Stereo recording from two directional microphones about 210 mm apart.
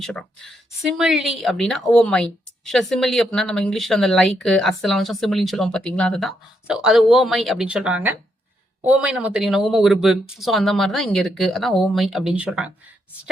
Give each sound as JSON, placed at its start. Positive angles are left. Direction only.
{"t": 0.0, "sound": "speech", "side_deg": 0}